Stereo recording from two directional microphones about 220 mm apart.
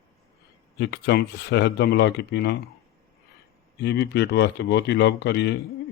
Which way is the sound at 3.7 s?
50° left (ahead or behind).